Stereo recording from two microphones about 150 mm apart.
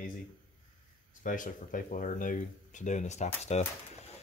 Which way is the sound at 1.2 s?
60° left (ahead or behind).